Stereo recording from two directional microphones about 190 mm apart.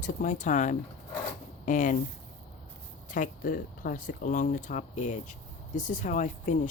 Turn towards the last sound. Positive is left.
turn(degrees=40)  # may be behind; listen again after turning